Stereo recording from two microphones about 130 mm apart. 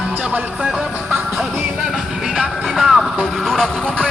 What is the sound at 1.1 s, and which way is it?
Music, 15° right (ahead or behind).